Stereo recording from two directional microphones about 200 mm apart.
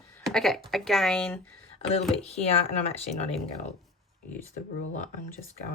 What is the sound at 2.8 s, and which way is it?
Speech, 30° left (ahead or behind).